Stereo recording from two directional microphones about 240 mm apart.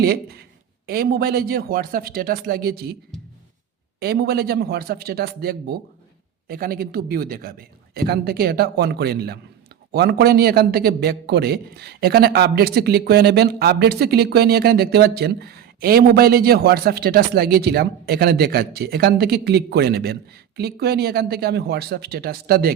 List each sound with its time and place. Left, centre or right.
0.0 s a man's voice: right
4.0 s a man's voice: right